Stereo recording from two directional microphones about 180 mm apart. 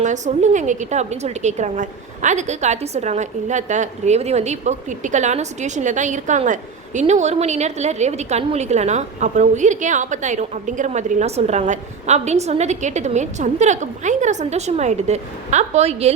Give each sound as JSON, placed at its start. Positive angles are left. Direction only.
{"t": 0.0, "sound": "a woman's voice", "side_deg": -40}